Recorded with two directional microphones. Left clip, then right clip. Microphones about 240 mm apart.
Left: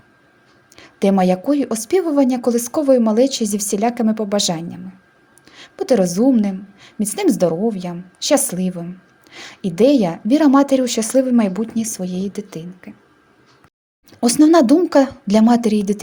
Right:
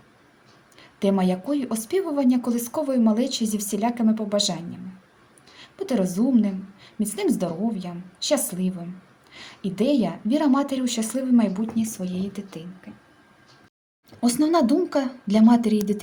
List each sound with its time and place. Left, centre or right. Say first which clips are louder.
0.8 s speech: left 7 dB; left
14.1 s speech: left 9 dB; left